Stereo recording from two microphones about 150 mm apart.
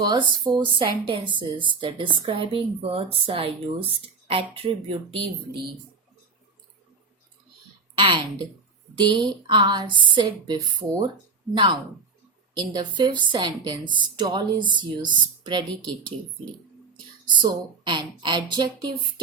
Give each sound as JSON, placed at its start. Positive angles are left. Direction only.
{"t": 0.0, "sound": "a woman's voice", "side_deg": -30}
{"t": 7.9, "sound": "a woman's voice", "side_deg": -35}
{"t": 17.2, "sound": "a woman's voice", "side_deg": -30}